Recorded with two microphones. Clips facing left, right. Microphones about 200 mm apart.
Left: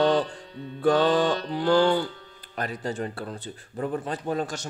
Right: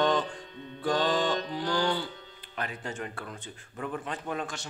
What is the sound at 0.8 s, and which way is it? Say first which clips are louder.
Speech: left 6 dB; 55° left (ahead or behind).